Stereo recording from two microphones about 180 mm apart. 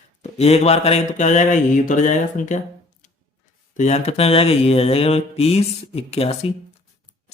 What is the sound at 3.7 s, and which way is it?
Speech, 40° left (ahead or behind).